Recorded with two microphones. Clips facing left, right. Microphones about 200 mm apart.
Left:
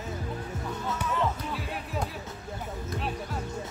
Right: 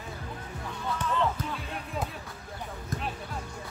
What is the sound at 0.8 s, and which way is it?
Music, 5° left (ahead or behind).